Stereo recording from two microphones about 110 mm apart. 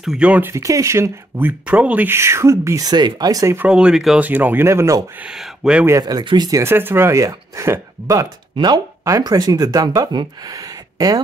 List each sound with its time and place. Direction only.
0.0 s speech: 5° right (ahead or behind)
0.5 s speech: 30° right (ahead or behind)
1.7 s speech: 10° right (ahead or behind); by 3.5 s 35° right (ahead or behind)
3.5 s speech: 10° right (ahead or behind)
4.3 s speech: 15° right (ahead or behind)
5.2 s speech: 5° right (ahead or behind)
5.9 s speech: 30° right (ahead or behind)
6.6 s speech: 20° right (ahead or behind)
8.5 s speech: 40° right (ahead or behind)